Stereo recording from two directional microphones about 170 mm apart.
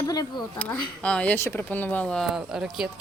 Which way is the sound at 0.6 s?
5° left (ahead or behind).